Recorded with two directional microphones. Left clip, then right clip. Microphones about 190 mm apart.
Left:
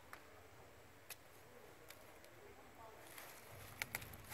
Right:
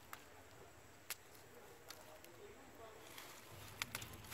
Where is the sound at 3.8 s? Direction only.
30° left (ahead or behind).